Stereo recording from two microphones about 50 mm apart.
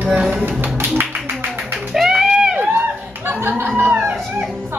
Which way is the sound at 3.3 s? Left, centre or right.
Right.